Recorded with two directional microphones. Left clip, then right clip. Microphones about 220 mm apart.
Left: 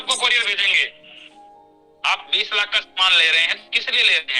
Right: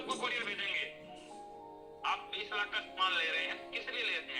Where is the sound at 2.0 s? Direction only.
45° left (ahead or behind).